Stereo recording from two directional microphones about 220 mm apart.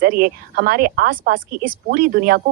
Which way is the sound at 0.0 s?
40° right (ahead or behind).